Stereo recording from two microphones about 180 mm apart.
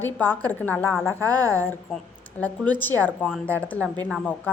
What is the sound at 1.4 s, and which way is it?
A woman's voice, 10° left (ahead or behind).